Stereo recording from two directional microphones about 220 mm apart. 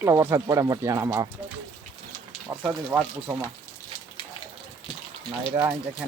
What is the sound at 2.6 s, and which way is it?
Speech, 5° right (ahead or behind).